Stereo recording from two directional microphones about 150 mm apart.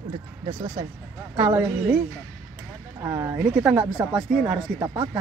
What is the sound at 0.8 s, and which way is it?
Speech, 30° right (ahead or behind).